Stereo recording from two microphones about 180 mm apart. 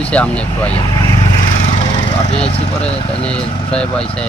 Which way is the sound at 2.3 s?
35° left (ahead or behind).